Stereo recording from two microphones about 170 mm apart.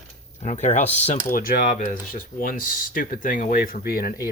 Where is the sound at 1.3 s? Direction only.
55° left (ahead or behind).